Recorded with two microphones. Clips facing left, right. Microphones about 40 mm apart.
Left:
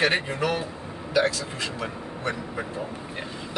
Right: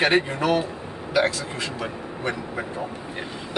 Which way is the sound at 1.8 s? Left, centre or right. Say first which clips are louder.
Right 2 dB; centre.